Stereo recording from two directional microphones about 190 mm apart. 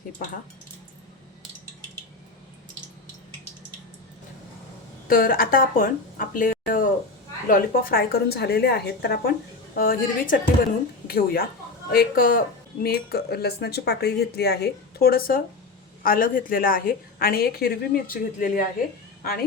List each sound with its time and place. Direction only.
0.2 s speech: 50° left (ahead or behind)
5.0 s a woman's voice: 50° left (ahead or behind)